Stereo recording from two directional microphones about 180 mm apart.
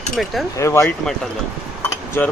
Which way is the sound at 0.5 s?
15° left (ahead or behind).